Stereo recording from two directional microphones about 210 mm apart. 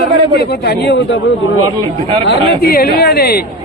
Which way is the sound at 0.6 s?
55° left (ahead or behind).